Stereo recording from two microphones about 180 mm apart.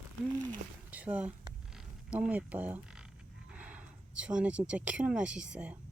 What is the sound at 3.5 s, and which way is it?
Speech, 5° right (ahead or behind).